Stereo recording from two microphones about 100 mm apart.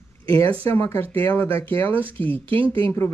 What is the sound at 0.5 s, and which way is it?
Speech, 15° left (ahead or behind).